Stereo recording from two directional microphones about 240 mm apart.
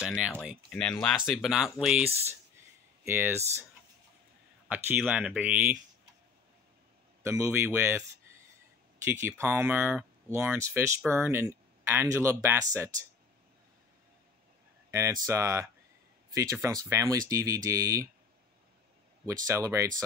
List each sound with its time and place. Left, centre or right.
0.0 s speech: centre
3.1 s speech: centre
4.6 s speech: centre
7.2 s speech: centre
9.1 s speech: centre
14.9 s speech: centre
19.2 s speech: centre